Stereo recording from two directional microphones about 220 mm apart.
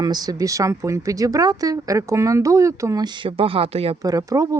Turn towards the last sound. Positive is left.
turn(degrees=-15)  # may be behind; listen again after turning